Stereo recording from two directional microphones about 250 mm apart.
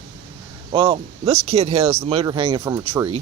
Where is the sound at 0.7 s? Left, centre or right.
Right.